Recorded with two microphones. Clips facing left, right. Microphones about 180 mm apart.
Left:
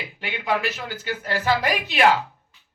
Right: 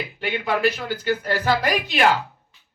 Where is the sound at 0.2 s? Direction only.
45° right (ahead or behind).